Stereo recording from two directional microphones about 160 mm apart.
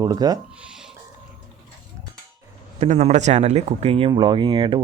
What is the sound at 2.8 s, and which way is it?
Speech, 45° right (ahead or behind).